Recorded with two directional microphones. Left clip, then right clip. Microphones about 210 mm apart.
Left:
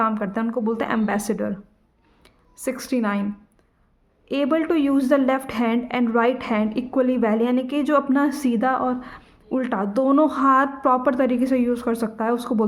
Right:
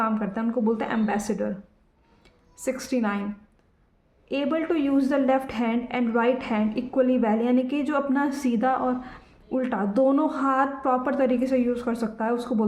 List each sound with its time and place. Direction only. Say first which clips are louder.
0.0 s a woman's voice: left 4 dB; 35° left (ahead or behind)
4.3 s a woman's voice: left 4 dB; 35° left (ahead or behind)